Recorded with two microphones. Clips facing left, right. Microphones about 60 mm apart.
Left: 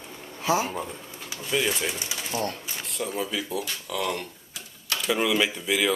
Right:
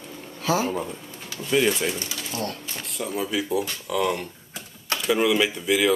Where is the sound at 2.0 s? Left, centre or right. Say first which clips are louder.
Left 1 dB; centre.